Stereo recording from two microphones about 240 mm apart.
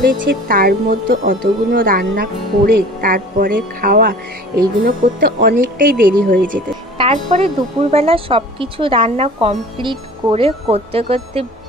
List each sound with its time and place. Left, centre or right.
0.5 s a woman's voice: right